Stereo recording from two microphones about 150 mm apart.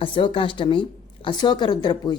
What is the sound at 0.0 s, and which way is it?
A woman's voice, 35° left (ahead or behind).